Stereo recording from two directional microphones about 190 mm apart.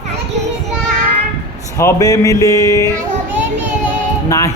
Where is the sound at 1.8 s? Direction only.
15° left (ahead or behind).